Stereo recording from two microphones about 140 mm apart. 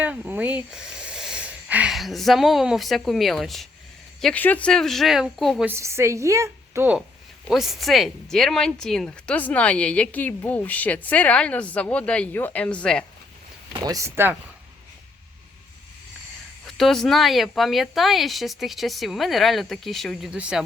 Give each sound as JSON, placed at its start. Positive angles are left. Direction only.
{"t": 0.0, "sound": "speech", "side_deg": -10}
{"t": 5.6, "sound": "a woman's voice", "side_deg": -20}
{"t": 7.4, "sound": "speech", "side_deg": 0}
{"t": 13.7, "sound": "a woman's voice", "side_deg": -25}
{"t": 16.6, "sound": "speech", "side_deg": 0}